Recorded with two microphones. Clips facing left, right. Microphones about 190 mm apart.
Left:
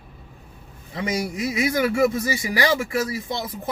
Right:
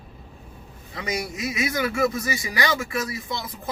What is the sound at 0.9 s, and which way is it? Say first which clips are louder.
Speech: left 4 dB; 25° left (ahead or behind).